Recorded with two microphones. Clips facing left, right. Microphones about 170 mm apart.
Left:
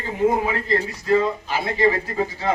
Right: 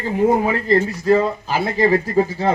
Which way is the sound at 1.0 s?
35° right (ahead or behind).